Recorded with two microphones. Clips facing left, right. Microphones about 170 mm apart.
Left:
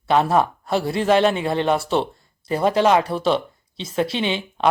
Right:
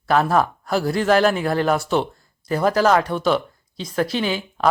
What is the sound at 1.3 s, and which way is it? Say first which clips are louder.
Speech: even; 25° left (ahead or behind).